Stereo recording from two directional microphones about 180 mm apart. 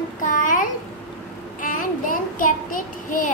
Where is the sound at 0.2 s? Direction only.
45° left (ahead or behind).